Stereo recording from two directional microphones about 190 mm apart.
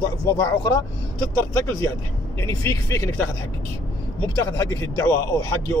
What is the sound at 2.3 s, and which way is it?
Speech, 15° left (ahead or behind).